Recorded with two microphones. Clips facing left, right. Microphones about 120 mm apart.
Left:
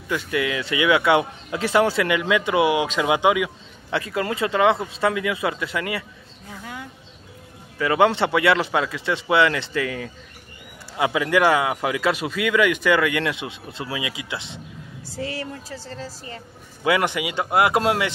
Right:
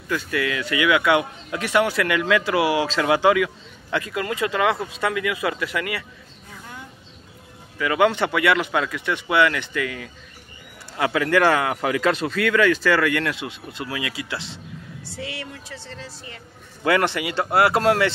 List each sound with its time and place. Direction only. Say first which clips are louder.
0.1 s a man's voice: left 1 dB; 20° left (ahead or behind)
3.9 s a man's voice: left 1 dB; 30° left (ahead or behind)
7.8 s a man's voice: left 1 dB; 30° left (ahead or behind)
11.0 s a man's voice: even; 15° left (ahead or behind)
15.0 s speech: left 4 dB; 40° left (ahead or behind)
16.8 s a man's voice: right 1 dB; 10° left (ahead or behind)